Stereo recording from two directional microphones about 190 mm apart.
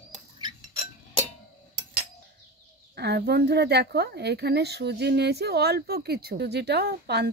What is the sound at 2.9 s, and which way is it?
A woman's voice, 60° right (ahead or behind).